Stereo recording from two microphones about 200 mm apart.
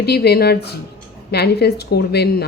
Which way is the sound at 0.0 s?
55° left (ahead or behind).